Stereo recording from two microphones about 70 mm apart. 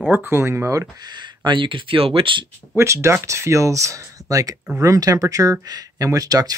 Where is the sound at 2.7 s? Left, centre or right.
Right.